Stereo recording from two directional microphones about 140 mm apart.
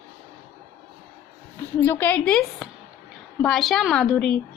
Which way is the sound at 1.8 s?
15° left (ahead or behind).